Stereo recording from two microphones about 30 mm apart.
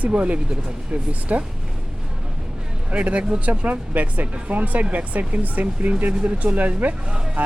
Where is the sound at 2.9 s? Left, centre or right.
Right.